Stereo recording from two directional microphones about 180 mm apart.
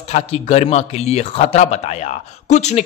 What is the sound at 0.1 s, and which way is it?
A man's voice, 40° left (ahead or behind).